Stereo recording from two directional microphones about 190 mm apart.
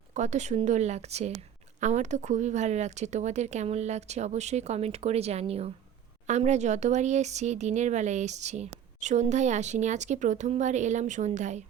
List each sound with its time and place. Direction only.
0.1 s speech: 40° right (ahead or behind)